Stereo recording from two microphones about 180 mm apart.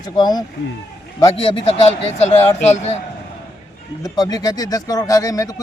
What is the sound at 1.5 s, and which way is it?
Speech, 35° left (ahead or behind).